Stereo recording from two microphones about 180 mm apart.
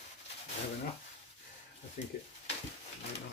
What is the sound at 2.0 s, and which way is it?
Speech, 45° left (ahead or behind).